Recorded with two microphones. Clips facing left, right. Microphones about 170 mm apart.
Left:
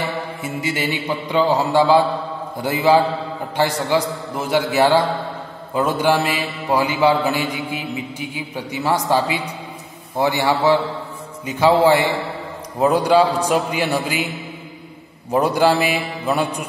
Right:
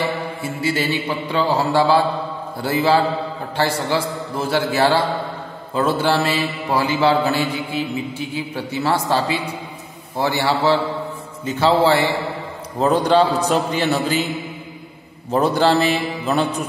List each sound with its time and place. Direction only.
0.4 s a man's voice: 20° left (ahead or behind)
15.3 s a man's voice: 10° left (ahead or behind)